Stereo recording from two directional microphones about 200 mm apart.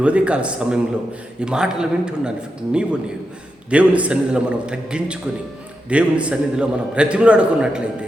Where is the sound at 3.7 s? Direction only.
5° right (ahead or behind).